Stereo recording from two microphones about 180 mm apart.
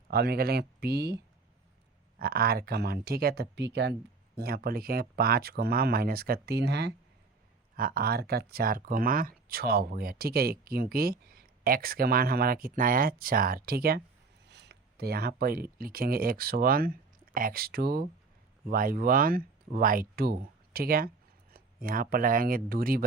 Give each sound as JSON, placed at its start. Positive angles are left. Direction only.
{"t": 0.1, "sound": "speech", "side_deg": -60}
{"t": 4.4, "sound": "speech", "side_deg": -60}
{"t": 7.8, "sound": "speech", "side_deg": -55}
{"t": 14.5, "sound": "a sound", "side_deg": -70}
{"t": 15.8, "sound": "speech", "side_deg": -55}